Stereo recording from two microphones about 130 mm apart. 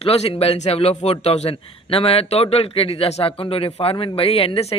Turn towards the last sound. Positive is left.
turn(degrees=50)  # may be behind; listen again after turning